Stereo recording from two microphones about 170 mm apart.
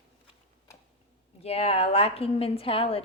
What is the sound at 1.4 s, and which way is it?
Speech, 35° left (ahead or behind).